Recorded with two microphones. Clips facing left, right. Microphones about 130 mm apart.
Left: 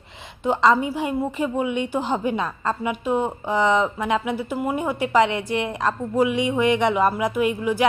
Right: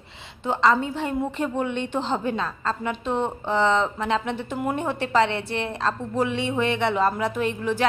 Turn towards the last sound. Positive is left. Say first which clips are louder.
# left 3 dB
turn(degrees=10)  # may be behind; listen again after turning